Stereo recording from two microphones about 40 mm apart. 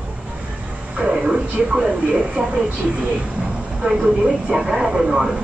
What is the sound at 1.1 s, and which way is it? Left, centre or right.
Speech, right.